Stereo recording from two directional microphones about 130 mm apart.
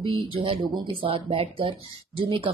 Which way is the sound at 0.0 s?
40° right (ahead or behind).